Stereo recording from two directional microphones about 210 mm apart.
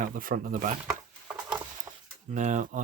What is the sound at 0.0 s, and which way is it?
Speech, 40° right (ahead or behind).